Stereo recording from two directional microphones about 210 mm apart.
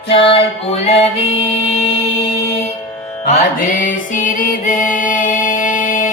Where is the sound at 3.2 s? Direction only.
35° left (ahead or behind).